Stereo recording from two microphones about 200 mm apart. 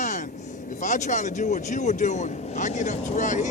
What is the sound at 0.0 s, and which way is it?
Vehicle, 35° left (ahead or behind).